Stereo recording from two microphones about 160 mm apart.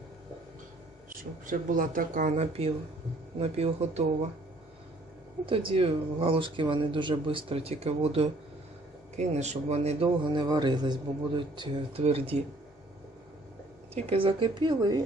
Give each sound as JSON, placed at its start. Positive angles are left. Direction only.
{"t": 1.1, "sound": "speech", "side_deg": -60}
{"t": 5.5, "sound": "speech", "side_deg": -35}
{"t": 10.3, "sound": "speech", "side_deg": -25}
{"t": 13.9, "sound": "speech", "side_deg": -35}